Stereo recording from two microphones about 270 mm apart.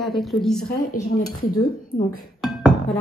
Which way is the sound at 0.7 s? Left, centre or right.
Left.